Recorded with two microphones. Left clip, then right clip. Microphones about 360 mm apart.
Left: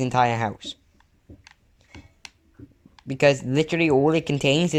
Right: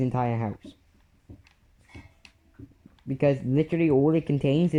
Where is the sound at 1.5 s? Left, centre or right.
Centre.